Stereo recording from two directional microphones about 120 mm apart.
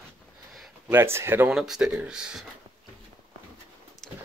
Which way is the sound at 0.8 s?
20° right (ahead or behind).